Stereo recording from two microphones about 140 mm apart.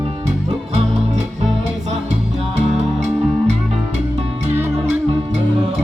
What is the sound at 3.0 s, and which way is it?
Music, 55° right (ahead or behind).